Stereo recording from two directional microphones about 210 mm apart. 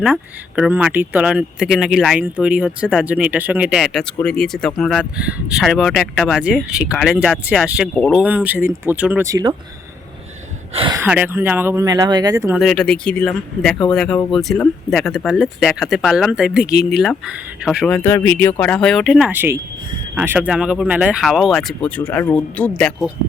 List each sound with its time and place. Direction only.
0.0 s speech: 5° right (ahead or behind)
10.8 s speech: 20° right (ahead or behind)
11.0 s speech: 10° right (ahead or behind)
12.5 s speech: centre (ahead or behind)